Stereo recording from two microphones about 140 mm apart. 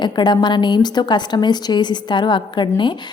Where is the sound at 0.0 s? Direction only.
30° left (ahead or behind).